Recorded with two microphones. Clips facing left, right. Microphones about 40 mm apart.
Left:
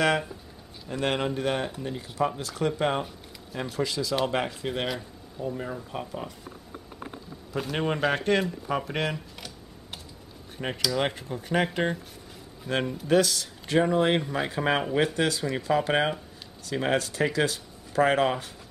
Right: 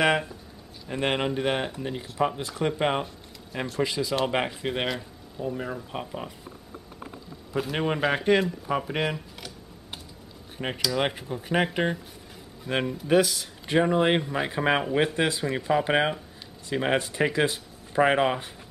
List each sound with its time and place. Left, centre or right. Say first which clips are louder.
0.0 s speech: right 1 dB; centre
4.8 s speech: right 1 dB; centre
7.5 s speech: right 1 dB; centre